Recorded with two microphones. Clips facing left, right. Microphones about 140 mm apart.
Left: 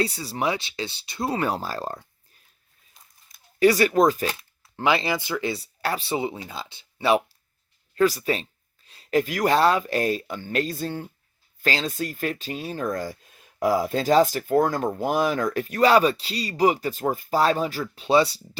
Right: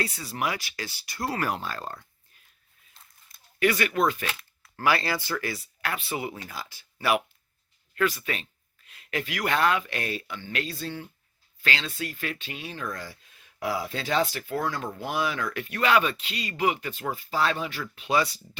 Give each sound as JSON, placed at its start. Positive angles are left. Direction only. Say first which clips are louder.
{"t": 0.0, "sound": "speech", "louder": "left 5 dB", "side_deg": 30}
{"t": 1.5, "sound": "speech", "louder": "left 5 dB", "side_deg": 35}
{"t": 3.6, "sound": "speech", "louder": "left 6 dB", "side_deg": 35}
{"t": 4.4, "sound": "speech", "louder": "left 5 dB", "side_deg": 25}
{"t": 7.9, "sound": "speech", "louder": "left 6 dB", "side_deg": 35}